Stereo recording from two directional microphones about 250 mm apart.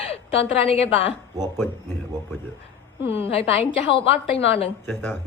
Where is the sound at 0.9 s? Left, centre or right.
Centre.